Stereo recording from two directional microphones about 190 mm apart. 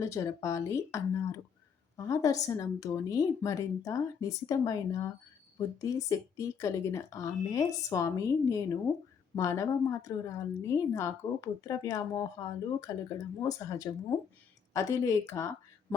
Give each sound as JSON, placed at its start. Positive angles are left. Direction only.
{"t": 0.0, "sound": "a woman's voice", "side_deg": 15}